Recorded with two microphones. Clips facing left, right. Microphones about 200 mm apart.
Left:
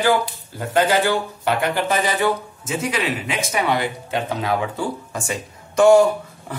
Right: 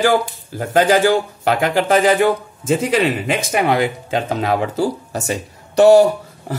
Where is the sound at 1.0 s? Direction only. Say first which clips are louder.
Right 5 dB; 45° right (ahead or behind).